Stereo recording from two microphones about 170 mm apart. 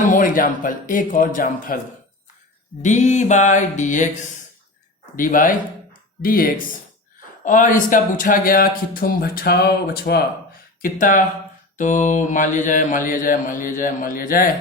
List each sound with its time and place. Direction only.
0.0 s mantra: 55° left (ahead or behind)
2.8 s mantra: 45° left (ahead or behind)
5.1 s speech: 50° left (ahead or behind)
10.8 s mantra: 55° left (ahead or behind)